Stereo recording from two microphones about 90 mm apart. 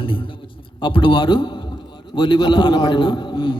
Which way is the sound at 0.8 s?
70° left (ahead or behind).